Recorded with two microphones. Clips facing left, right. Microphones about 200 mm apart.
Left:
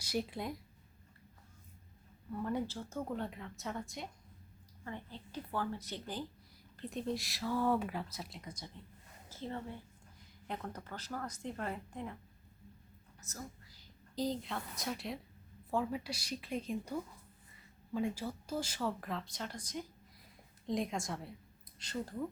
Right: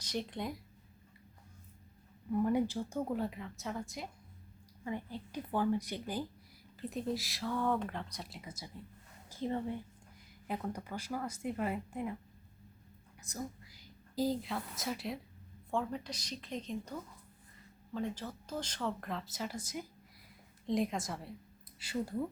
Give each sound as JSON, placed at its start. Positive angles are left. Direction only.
{"t": 0.0, "sound": "speech", "side_deg": 5}
{"t": 2.3, "sound": "speech", "side_deg": -15}
{"t": 4.8, "sound": "a woman's voice", "side_deg": -10}
{"t": 13.2, "sound": "a woman's voice", "side_deg": -15}